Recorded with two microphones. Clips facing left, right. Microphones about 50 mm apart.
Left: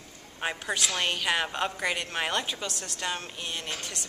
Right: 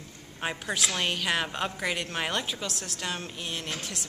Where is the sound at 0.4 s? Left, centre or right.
Centre.